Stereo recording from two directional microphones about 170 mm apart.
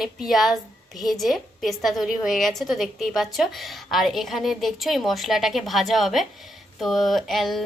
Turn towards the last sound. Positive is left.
turn(degrees=0)  # may be behind; listen again after turning